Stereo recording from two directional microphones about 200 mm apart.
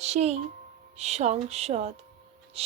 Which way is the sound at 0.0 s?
35° right (ahead or behind).